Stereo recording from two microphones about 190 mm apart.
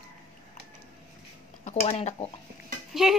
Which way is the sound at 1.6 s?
35° left (ahead or behind).